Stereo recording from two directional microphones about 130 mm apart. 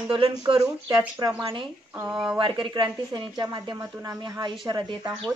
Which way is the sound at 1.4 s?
40° right (ahead or behind).